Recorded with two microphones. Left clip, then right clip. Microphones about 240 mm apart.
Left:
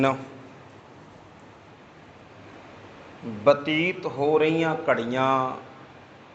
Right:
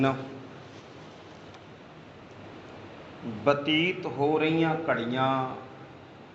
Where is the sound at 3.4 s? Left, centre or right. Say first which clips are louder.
Left 4 dB; left.